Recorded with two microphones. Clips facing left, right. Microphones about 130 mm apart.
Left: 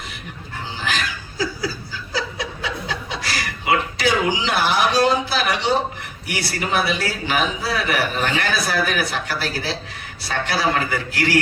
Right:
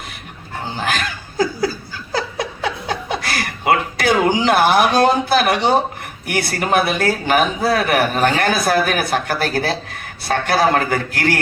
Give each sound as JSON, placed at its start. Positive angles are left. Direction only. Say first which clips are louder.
{"t": 0.6, "sound": "laughter", "louder": "right 4 dB", "side_deg": -50}
{"t": 6.2, "sound": "a man's voice", "louder": "right 5 dB", "side_deg": -50}